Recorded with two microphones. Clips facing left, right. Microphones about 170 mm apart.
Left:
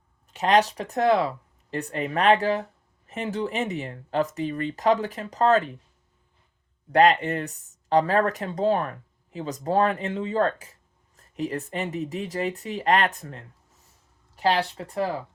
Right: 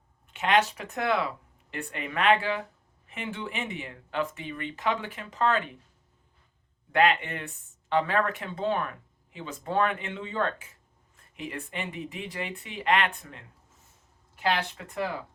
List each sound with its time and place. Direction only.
0.3 s speech: 40° left (ahead or behind)
6.9 s speech: 40° left (ahead or behind)